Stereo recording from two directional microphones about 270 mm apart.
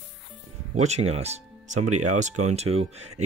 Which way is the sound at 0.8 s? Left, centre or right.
Right.